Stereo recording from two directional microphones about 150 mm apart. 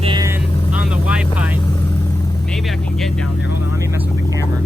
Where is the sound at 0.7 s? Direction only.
10° right (ahead or behind).